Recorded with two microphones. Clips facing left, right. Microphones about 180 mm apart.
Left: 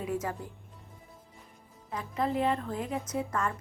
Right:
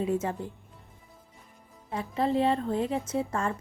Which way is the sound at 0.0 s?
25° right (ahead or behind).